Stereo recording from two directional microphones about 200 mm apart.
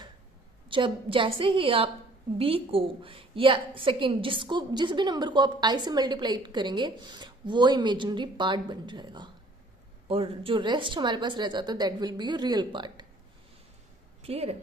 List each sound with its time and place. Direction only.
0.7 s a woman's voice: 25° right (ahead or behind)
14.2 s a woman's voice: 30° right (ahead or behind)